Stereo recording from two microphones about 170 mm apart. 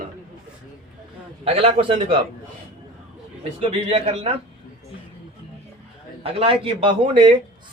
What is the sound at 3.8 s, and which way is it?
Speech, 35° right (ahead or behind).